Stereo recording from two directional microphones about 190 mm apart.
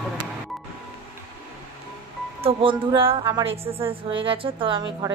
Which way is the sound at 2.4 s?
25° right (ahead or behind).